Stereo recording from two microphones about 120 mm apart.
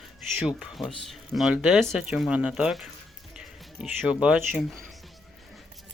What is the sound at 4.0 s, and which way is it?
Speech, 5° right (ahead or behind).